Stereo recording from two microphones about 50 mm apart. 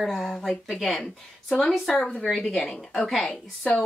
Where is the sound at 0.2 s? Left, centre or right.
Centre.